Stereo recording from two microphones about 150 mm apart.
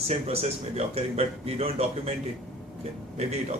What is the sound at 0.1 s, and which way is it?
A man's voice, 45° right (ahead or behind).